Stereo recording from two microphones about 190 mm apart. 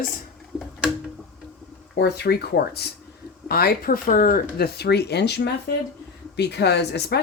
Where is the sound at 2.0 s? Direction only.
60° left (ahead or behind).